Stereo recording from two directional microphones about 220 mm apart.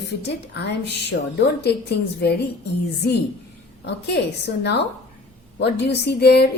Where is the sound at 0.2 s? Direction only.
50° left (ahead or behind).